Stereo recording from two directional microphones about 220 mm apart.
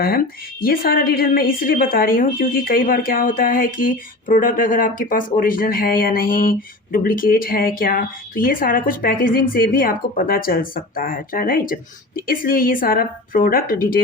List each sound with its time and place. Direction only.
0.6 s a woman's voice: 40° left (ahead or behind)